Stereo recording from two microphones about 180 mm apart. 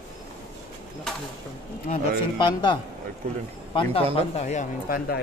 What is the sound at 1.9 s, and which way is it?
Speech, 40° left (ahead or behind).